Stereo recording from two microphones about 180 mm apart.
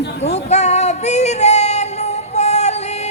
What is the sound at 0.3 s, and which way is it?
Female singing, 40° left (ahead or behind).